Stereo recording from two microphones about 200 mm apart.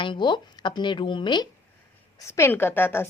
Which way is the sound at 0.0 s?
25° left (ahead or behind).